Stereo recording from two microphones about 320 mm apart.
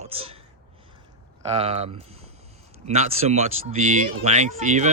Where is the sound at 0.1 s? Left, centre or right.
Centre.